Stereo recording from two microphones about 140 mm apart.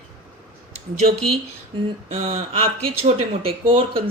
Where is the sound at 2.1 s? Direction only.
45° right (ahead or behind).